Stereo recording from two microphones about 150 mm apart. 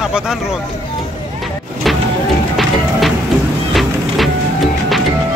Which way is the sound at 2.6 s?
Centre (ahead or behind).